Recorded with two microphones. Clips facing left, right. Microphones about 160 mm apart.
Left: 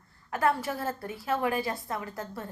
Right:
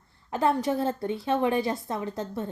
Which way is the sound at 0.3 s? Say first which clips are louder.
Right 3 dB; 20° right (ahead or behind).